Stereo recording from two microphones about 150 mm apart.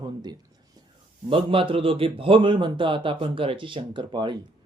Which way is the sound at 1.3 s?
35° right (ahead or behind).